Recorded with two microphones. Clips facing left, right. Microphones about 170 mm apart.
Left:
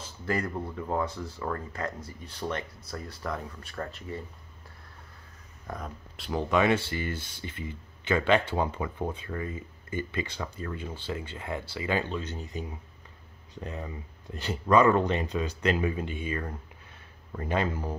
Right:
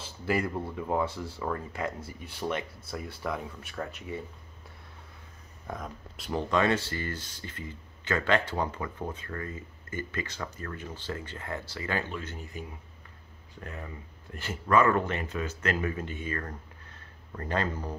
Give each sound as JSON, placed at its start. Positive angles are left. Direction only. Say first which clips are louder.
{"t": 0.2, "sound": "speech", "louder": "right 1 dB", "side_deg": -5}
{"t": 5.7, "sound": "speech", "louder": "even", "side_deg": 0}